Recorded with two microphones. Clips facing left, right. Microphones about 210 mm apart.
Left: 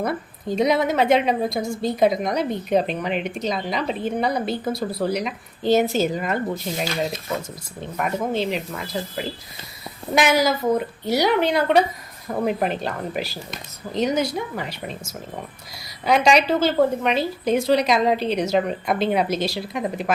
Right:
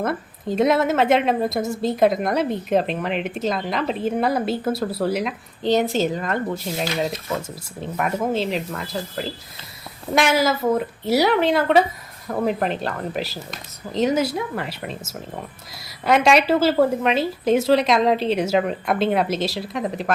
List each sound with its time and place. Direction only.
0.0 s speech: centre (ahead or behind)
6.5 s speech: 5° right (ahead or behind)